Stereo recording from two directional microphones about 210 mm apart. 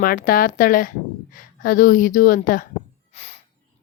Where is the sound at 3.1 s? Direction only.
30° left (ahead or behind).